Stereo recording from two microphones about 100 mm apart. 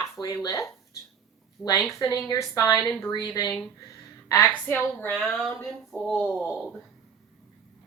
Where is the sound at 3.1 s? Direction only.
45° left (ahead or behind).